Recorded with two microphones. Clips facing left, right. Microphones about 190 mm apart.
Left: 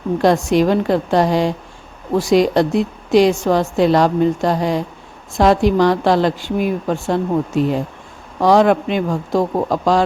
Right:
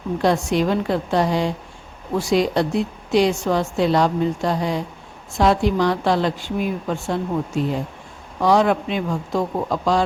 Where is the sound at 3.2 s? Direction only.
85° left.